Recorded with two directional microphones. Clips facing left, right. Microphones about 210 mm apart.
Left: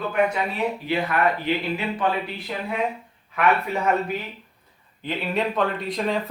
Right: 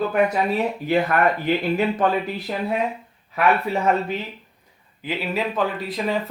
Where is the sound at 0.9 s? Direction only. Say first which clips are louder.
Right 4 dB; 45° right (ahead or behind).